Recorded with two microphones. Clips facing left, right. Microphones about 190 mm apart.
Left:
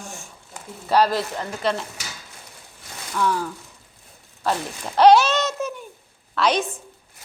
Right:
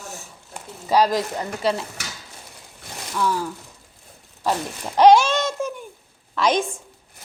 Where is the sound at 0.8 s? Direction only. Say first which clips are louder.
Right 1 dB; 10° right (ahead or behind).